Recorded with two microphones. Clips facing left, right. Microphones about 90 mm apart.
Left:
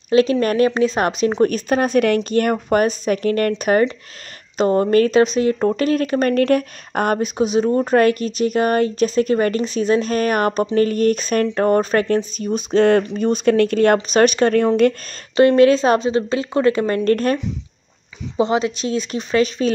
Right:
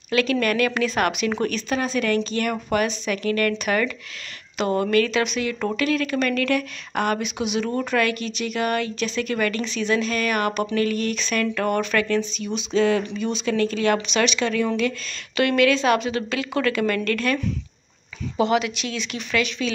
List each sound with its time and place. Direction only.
0.1 s a woman's voice: 35° left (ahead or behind); by 13.9 s 55° left (ahead or behind)
13.9 s speech: 40° left (ahead or behind)
15.3 s a woman's voice: 35° left (ahead or behind)
18.4 s a woman's voice: 30° left (ahead or behind)